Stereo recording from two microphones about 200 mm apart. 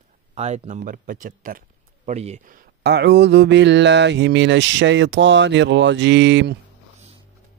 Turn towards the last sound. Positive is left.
turn(degrees=-65)  # may be behind; listen again after turning